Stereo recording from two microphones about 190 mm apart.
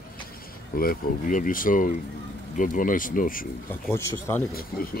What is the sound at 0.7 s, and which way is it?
Speech, 50° left (ahead or behind).